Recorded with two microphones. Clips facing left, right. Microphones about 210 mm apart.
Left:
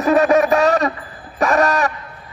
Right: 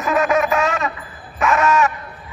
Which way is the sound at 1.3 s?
35° left (ahead or behind).